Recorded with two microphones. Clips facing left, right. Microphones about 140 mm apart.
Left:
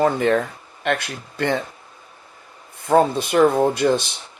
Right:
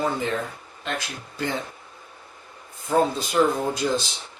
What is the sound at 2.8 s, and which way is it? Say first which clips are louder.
Speech: left 5 dB; 65° left (ahead or behind).